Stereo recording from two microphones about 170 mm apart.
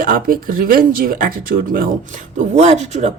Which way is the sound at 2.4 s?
40° right (ahead or behind).